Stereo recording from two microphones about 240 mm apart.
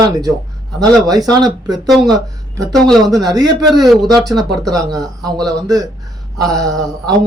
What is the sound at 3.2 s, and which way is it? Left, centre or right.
Speech, centre.